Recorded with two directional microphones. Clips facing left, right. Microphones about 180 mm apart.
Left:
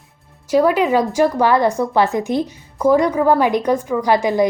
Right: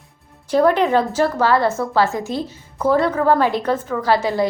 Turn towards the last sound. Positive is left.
turn(degrees=15)  # may be behind; listen again after turning